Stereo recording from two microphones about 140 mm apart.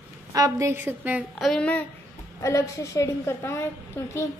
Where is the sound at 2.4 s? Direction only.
25° left (ahead or behind).